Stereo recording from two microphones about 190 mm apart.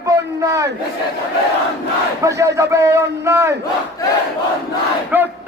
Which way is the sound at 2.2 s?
15° right (ahead or behind).